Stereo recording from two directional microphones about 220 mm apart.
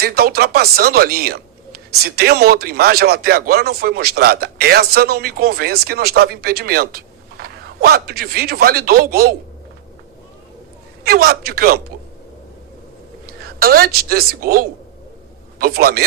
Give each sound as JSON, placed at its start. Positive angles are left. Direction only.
{"t": 0.0, "sound": "speech", "side_deg": -45}
{"t": 11.0, "sound": "speech", "side_deg": -45}
{"t": 13.2, "sound": "a woman's voice", "side_deg": -45}